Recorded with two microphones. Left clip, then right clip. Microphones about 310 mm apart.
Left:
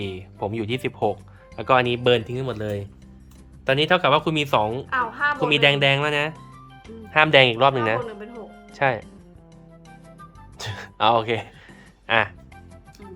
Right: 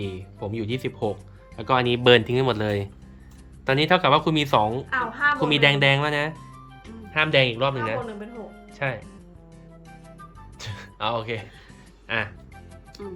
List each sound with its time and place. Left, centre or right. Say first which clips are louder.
0.0 s speech: left 4 dB; centre
4.9 s music: even; centre
5.4 s speech: left 3 dB; centre
10.6 s speech: left 7 dB; centre